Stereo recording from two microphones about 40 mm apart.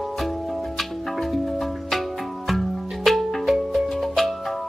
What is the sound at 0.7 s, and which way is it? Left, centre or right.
Music, centre.